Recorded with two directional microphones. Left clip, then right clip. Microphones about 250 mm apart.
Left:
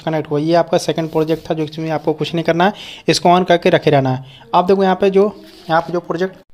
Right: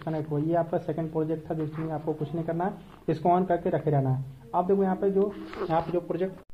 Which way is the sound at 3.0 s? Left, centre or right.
Left.